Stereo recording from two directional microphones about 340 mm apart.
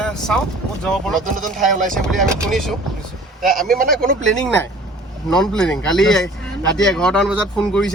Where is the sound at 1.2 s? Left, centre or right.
Right.